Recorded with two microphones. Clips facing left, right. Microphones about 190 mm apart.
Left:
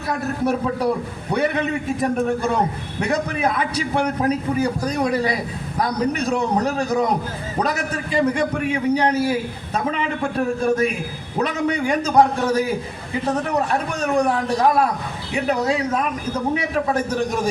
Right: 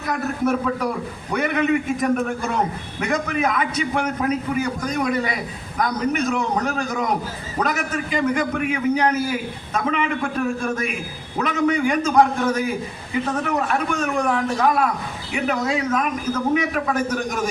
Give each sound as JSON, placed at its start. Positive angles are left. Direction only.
{"t": 0.1, "sound": "a man's voice", "side_deg": 30}